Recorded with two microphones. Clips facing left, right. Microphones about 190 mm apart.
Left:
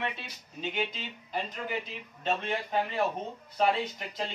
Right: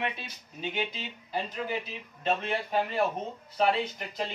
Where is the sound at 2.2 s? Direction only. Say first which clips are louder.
Right 2 dB; 5° right (ahead or behind).